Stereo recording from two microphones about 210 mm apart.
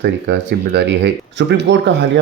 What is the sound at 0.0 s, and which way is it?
Speech, 55° right (ahead or behind).